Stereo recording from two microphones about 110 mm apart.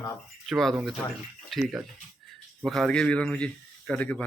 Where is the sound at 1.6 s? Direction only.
10° right (ahead or behind).